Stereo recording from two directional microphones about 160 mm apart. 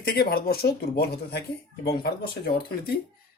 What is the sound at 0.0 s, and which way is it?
Speech, 75° left (ahead or behind).